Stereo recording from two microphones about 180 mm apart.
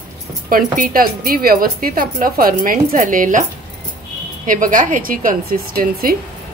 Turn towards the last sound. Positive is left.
turn(degrees=-55)  # may be behind; listen again after turning